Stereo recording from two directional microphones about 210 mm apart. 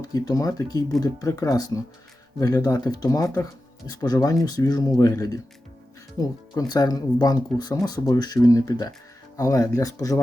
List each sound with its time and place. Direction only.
0.0 s speech: 15° left (ahead or behind)